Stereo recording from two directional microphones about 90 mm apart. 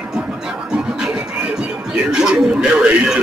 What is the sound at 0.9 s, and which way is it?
Music, 10° right (ahead or behind).